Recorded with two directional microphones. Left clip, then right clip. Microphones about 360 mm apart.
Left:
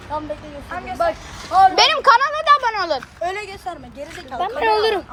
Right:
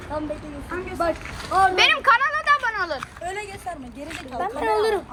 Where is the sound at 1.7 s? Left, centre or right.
Centre.